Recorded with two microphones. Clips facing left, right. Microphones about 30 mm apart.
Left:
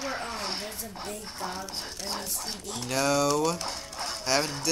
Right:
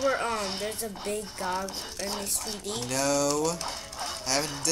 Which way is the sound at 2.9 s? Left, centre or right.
Centre.